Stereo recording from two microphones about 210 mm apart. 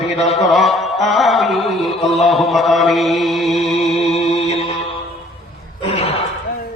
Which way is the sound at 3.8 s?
30° left (ahead or behind).